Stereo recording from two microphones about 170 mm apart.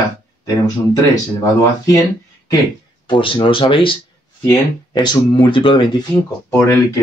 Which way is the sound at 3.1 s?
30° left (ahead or behind).